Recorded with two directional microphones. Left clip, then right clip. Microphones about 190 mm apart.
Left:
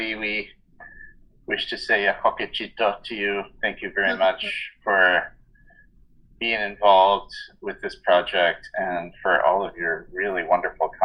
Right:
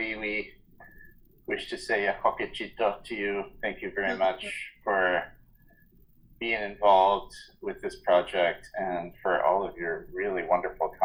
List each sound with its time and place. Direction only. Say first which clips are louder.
0.0 s a sound: left 5 dB; 30° left (ahead or behind)
1.5 s speech: left 7 dB; 25° left (ahead or behind)
6.4 s speech: left 5 dB; 30° left (ahead or behind)